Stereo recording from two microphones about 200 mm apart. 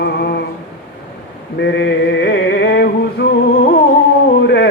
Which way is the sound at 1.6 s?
60° left (ahead or behind).